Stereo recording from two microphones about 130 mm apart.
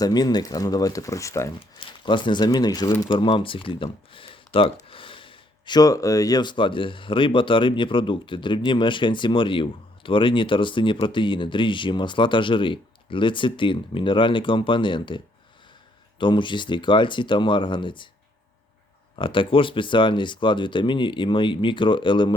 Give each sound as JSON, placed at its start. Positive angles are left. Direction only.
{"t": 0.0, "sound": "speech", "side_deg": 30}
{"t": 1.8, "sound": "speech", "side_deg": 40}
{"t": 19.1, "sound": "speech", "side_deg": 40}